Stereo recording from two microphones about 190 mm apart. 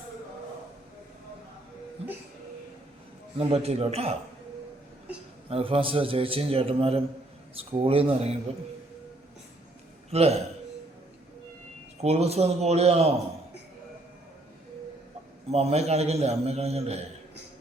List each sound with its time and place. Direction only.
3.3 s a man's voice: 35° right (ahead or behind)
5.5 s a man's voice: 30° right (ahead or behind)
10.1 s a man's voice: 35° right (ahead or behind)
11.9 s a man's voice: 35° right (ahead or behind)
15.4 s a man's voice: 35° right (ahead or behind)